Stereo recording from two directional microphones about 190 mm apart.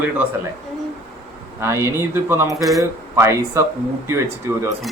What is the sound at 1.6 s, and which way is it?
Speech, 15° right (ahead or behind).